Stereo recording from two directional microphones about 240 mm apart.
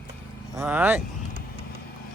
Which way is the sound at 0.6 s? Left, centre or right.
Centre.